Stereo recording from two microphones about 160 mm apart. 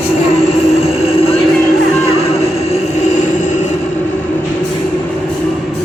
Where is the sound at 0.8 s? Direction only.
40° left (ahead or behind).